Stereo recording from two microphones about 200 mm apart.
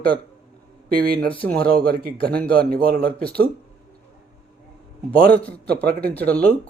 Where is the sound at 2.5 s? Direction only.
50° right (ahead or behind).